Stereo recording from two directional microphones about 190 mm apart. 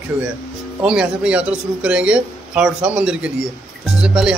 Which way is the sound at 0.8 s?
5° right (ahead or behind).